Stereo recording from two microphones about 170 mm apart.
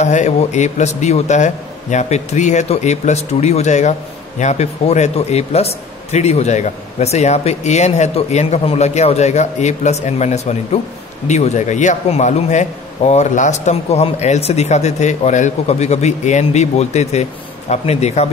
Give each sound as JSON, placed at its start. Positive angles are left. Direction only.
{"t": 0.0, "sound": "a man's voice", "side_deg": 45}